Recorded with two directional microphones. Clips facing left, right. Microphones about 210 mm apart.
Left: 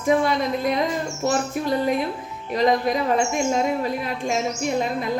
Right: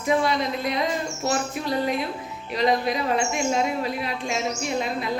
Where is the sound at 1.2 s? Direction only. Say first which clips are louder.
Left 4 dB; 50° left (ahead or behind).